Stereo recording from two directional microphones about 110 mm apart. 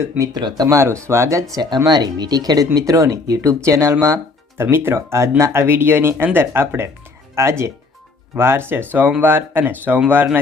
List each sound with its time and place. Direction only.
0.3 s speech: 40° right (ahead or behind)
1.9 s speech: 40° right (ahead or behind); by 10.0 s 20° right (ahead or behind)